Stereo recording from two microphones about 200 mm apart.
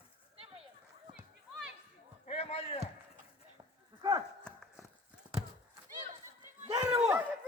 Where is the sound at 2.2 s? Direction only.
30° left (ahead or behind).